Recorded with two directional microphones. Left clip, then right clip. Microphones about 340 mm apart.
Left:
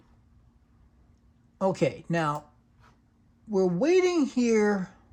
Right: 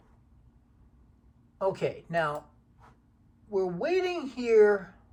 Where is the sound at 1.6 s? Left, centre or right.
Left.